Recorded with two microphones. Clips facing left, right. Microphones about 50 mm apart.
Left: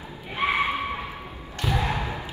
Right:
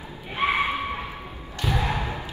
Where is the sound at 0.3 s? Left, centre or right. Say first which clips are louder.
Right 1 dB; centre.